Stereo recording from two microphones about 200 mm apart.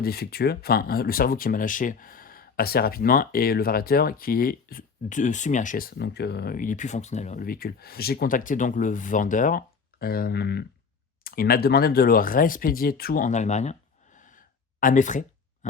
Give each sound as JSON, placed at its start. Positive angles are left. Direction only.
{"t": 0.0, "sound": "speech", "side_deg": 50}
{"t": 14.2, "sound": "gasp", "side_deg": 40}